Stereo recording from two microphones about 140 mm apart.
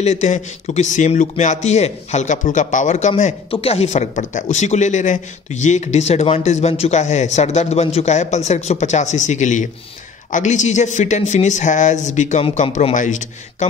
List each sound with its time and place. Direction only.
0.0 s speech: 55° left (ahead or behind)
3.4 s speech: 40° left (ahead or behind); by 13.7 s 60° left (ahead or behind)